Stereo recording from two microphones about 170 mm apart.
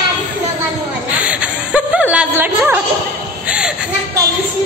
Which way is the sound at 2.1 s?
10° right (ahead or behind).